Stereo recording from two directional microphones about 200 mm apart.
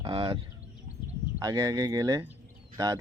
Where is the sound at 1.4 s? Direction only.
15° right (ahead or behind).